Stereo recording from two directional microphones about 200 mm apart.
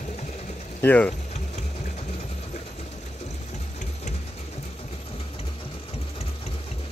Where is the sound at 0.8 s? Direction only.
5° left (ahead or behind).